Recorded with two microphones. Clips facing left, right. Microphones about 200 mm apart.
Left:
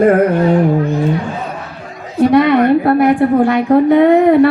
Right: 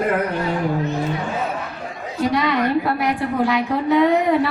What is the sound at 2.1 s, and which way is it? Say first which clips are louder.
A woman's voice: left 10 dB; 55° left (ahead or behind).